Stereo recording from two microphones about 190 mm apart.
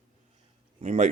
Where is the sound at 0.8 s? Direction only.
40° right (ahead or behind).